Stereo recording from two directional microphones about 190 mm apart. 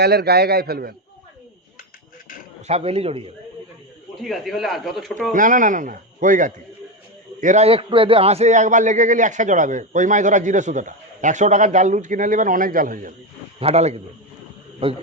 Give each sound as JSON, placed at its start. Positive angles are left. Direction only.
{"t": 0.0, "sound": "a man's voice", "side_deg": -60}
{"t": 2.6, "sound": "a man's voice", "side_deg": -35}
{"t": 4.2, "sound": "speech", "side_deg": 0}
{"t": 5.3, "sound": "a man's voice", "side_deg": -45}
{"t": 13.6, "sound": "a man's voice", "side_deg": -35}